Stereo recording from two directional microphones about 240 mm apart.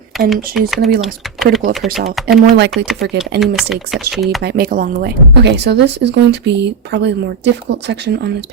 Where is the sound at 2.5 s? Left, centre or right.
Right.